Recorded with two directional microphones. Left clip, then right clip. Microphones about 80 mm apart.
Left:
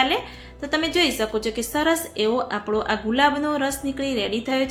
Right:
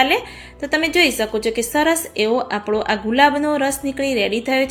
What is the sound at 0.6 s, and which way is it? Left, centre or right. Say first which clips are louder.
A woman's voice: right 5 dB; right.